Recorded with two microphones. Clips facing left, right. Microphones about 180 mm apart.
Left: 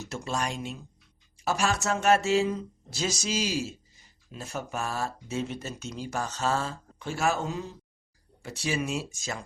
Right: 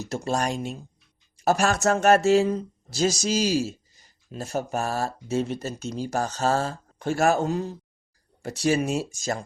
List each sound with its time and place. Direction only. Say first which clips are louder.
0.1 s speech: right 6 dB; 40° right (ahead or behind)